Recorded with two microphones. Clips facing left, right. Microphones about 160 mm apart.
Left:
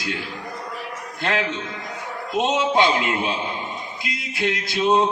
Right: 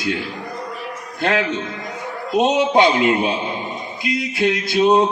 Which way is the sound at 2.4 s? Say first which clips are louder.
Right 4 dB; 60° right (ahead or behind).